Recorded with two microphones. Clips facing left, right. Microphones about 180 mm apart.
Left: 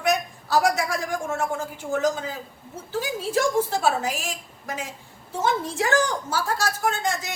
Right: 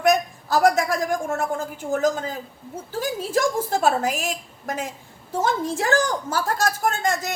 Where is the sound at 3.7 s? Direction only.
50° right (ahead or behind).